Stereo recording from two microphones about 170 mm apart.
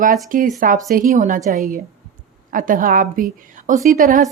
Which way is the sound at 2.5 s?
50° right (ahead or behind).